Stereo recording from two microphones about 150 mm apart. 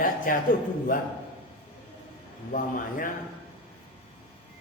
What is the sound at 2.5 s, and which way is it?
Speech, 65° left (ahead or behind).